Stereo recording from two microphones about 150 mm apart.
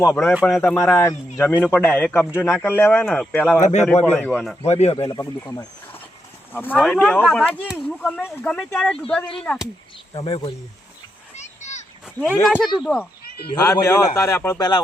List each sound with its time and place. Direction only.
0.4 s a man's voice: 5° left (ahead or behind)
3.6 s speech: 50° left (ahead or behind)
4.1 s speech: 5° left (ahead or behind)
4.6 s speech: 45° left (ahead or behind)
5.1 s a man's voice: 20° left (ahead or behind)
10.2 s speech: 30° left (ahead or behind)
11.3 s splash: 50° left (ahead or behind)
12.0 s speech: centre (ahead or behind)
13.6 s a man's voice: 20° left (ahead or behind)